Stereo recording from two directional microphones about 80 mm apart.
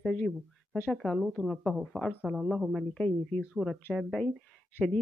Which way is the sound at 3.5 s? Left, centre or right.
Centre.